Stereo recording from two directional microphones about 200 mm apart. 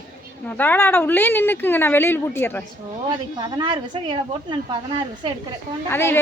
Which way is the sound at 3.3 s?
20° right (ahead or behind).